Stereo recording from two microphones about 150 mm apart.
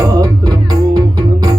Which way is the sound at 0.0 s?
25° right (ahead or behind).